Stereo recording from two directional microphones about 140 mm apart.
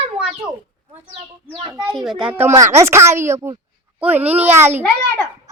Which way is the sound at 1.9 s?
Centre (ahead or behind).